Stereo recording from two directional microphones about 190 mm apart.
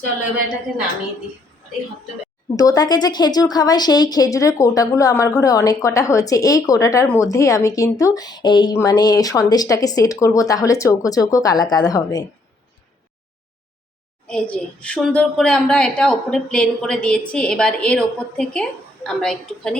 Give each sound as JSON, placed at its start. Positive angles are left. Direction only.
{"t": 2.6, "sound": "a woman's voice", "side_deg": 20}
{"t": 14.3, "sound": "a woman's voice", "side_deg": 5}